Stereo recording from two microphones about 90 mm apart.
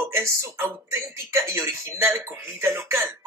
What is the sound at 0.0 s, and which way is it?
Speech, 30° right (ahead or behind).